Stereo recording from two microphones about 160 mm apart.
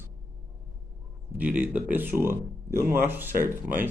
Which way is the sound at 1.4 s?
10° right (ahead or behind).